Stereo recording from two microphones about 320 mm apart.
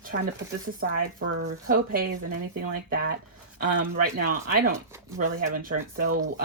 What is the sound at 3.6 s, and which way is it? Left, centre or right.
Speech, right.